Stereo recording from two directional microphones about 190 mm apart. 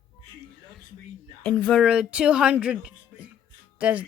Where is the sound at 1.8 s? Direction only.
5° right (ahead or behind).